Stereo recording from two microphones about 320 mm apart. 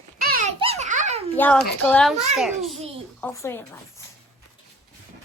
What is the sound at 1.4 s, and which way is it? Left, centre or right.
A woman's voice, centre.